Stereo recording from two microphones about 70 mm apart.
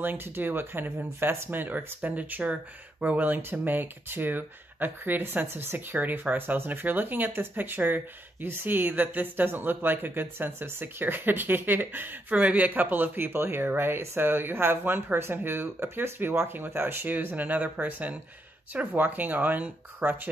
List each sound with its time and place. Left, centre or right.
0.0 s speech: right